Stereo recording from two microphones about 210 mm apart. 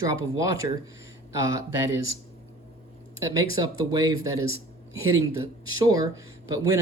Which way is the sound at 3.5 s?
15° right (ahead or behind).